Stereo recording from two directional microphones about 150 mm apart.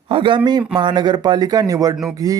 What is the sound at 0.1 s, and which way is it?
Speech, 35° right (ahead or behind).